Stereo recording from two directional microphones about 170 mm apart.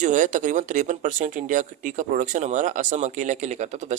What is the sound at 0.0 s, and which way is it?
Speech, 50° right (ahead or behind).